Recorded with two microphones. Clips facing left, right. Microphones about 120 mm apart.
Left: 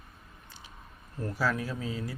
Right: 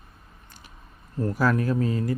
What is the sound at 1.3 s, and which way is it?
Speech, 50° right (ahead or behind).